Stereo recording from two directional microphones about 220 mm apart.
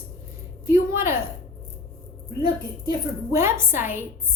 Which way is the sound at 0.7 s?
10° right (ahead or behind).